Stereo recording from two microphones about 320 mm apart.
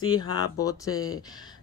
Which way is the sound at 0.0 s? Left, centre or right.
Centre.